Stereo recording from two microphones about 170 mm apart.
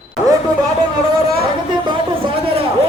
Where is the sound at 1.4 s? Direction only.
30° right (ahead or behind).